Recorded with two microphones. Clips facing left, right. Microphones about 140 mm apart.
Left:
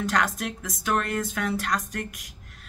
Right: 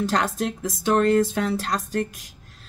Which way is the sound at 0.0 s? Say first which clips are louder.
Right 3 dB; 30° right (ahead or behind).